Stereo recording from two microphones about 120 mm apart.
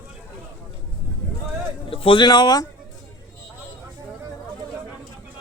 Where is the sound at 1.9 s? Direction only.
50° left (ahead or behind).